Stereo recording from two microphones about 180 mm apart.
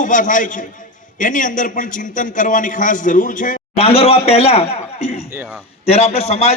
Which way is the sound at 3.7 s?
35° left (ahead or behind).